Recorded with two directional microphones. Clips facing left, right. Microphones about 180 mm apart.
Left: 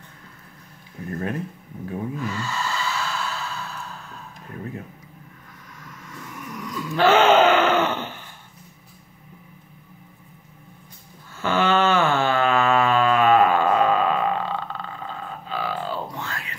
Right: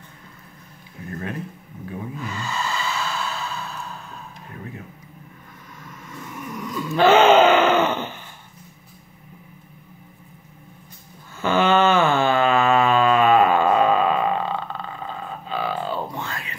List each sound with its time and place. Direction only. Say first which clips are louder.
1.0 s speech: left 3 dB; 45° left (ahead or behind)
2.3 s sigh: even; 20° right (ahead or behind)
6.5 s groan: right 3 dB; 25° right (ahead or behind)
11.4 s a sound: right 2 dB; 15° right (ahead or behind)
15.0 s grunt: right 2 dB; 20° right (ahead or behind)